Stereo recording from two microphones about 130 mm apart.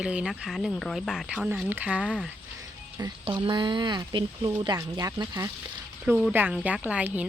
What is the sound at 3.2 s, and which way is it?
Speech, 40° right (ahead or behind).